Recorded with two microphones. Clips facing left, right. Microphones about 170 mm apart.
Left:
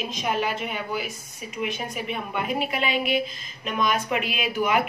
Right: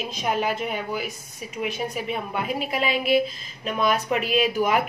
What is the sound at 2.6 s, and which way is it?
A woman's voice, 35° right (ahead or behind).